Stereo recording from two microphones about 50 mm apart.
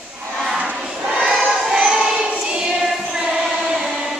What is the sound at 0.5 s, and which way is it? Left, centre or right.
Choir, centre.